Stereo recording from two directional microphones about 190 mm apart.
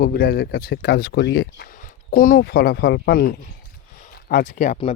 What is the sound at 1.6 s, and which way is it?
Speech, 45° left (ahead or behind).